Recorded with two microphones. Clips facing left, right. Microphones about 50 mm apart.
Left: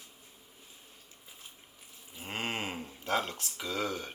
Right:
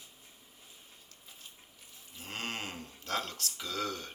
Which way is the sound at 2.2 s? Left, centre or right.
Centre.